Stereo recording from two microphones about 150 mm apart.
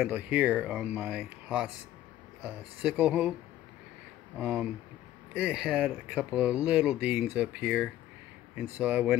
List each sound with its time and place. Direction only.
0.0 s speech: 10° right (ahead or behind)
4.4 s speech: 5° right (ahead or behind)